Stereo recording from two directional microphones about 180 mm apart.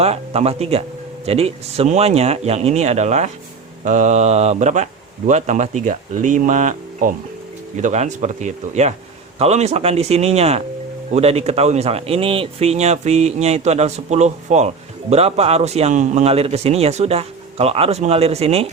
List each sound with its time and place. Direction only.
0.0 s speech: 35° right (ahead or behind)